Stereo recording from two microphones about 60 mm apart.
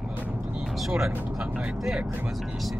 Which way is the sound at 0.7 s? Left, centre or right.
Centre.